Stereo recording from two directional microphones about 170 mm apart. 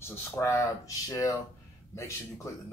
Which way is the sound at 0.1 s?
20° left (ahead or behind).